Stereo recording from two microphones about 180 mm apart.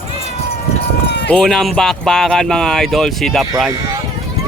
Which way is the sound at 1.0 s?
70° left (ahead or behind).